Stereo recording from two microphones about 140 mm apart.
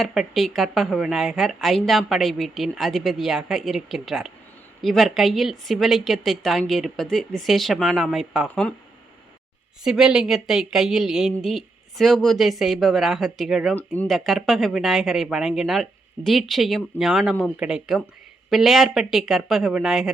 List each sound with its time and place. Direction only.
0.0 s a woman's voice: centre (ahead or behind)
9.8 s a woman's voice: 5° right (ahead or behind)
13.7 s speech: 10° left (ahead or behind)
14.1 s a woman's voice: centre (ahead or behind)